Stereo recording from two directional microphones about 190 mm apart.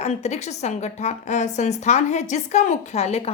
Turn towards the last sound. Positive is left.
turn(degrees=35)  # may be behind; listen again after turning